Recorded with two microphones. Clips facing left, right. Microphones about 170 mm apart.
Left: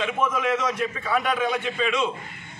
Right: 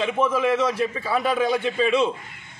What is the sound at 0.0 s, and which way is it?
A man's voice, 30° right (ahead or behind).